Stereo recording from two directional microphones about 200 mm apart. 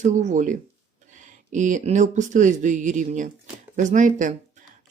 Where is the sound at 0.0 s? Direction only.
35° right (ahead or behind).